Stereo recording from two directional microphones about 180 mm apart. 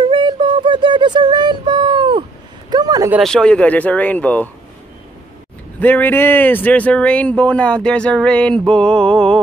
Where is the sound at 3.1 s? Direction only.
Centre (ahead or behind).